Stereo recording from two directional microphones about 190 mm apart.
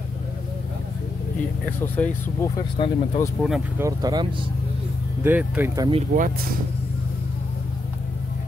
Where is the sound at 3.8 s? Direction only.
20° right (ahead or behind).